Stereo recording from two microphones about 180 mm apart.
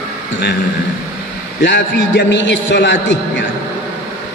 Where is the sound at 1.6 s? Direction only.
75° left (ahead or behind).